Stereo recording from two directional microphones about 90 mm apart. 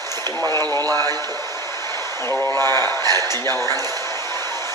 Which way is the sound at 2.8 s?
45° right (ahead or behind).